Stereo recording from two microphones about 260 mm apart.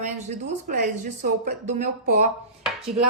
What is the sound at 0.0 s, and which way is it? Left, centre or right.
Speech, right.